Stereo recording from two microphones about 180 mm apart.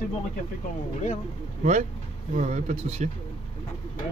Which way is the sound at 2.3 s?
40° right (ahead or behind).